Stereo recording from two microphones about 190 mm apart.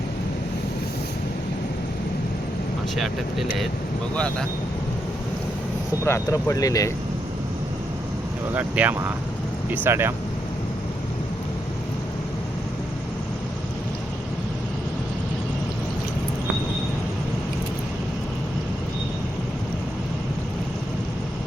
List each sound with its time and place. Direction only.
2.9 s speech: centre (ahead or behind)
6.1 s speech: 15° left (ahead or behind)
8.5 s speech: 10° right (ahead or behind)